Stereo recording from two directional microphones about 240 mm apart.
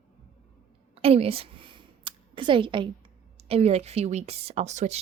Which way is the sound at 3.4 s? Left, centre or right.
Right.